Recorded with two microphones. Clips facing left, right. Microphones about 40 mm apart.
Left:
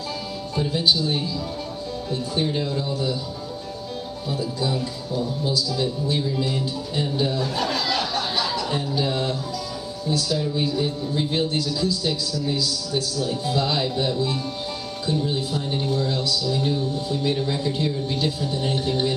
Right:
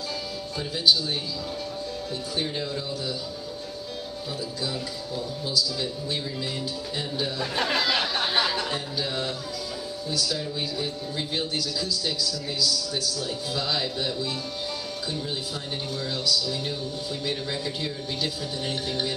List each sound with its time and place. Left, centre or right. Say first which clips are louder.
0.6 s a man's voice: left 2 dB; centre
2.4 s a man's voice: left 5 dB; centre
4.3 s a man's voice: left 7 dB; centre
6.0 s speech: left 6 dB; centre
7.5 s chatter: left 1 dB; right
8.7 s a man's voice: left 5 dB; centre
10.3 s a man's voice: left 6 dB; centre
11.5 s a man's voice: left 5 dB; centre
13.2 s a man's voice: left 6 dB; centre